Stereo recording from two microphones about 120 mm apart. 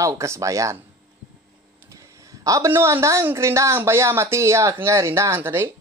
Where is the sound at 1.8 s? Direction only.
25° right (ahead or behind).